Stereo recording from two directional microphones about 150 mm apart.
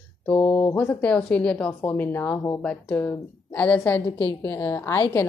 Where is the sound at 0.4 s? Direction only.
15° left (ahead or behind).